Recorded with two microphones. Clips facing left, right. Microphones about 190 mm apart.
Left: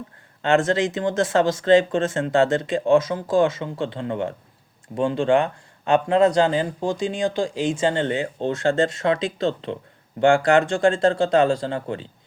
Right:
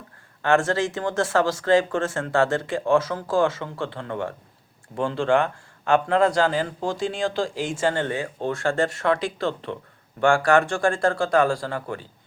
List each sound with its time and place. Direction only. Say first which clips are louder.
0.4 s speech: left 2 dB; 20° left (ahead or behind)